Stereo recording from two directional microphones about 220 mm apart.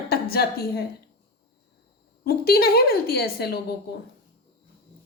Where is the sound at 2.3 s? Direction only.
45° left (ahead or behind).